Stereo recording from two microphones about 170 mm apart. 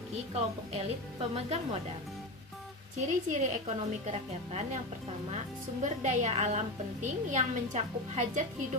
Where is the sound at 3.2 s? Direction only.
45° right (ahead or behind).